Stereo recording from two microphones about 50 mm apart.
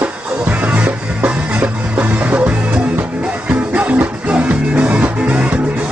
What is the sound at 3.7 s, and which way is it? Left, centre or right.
Music, right.